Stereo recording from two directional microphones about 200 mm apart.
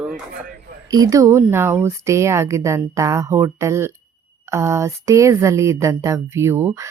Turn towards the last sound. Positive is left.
turn(degrees=-10)  # may be behind; listen again after turning